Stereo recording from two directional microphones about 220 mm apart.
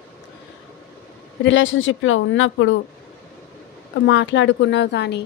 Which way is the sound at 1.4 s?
60° left (ahead or behind).